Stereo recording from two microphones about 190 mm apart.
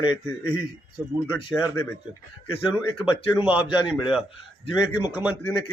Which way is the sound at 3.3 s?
5° right (ahead or behind).